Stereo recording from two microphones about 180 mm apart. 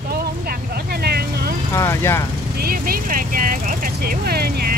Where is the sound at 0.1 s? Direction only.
60° right (ahead or behind).